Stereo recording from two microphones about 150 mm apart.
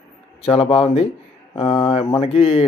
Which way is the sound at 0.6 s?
30° left (ahead or behind).